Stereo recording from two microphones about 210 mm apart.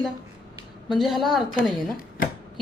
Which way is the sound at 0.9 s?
Centre (ahead or behind).